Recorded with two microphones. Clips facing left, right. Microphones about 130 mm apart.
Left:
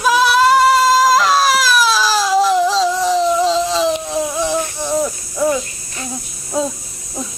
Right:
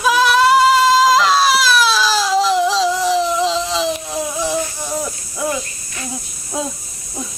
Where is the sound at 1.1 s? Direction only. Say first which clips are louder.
Even; 45° left (ahead or behind).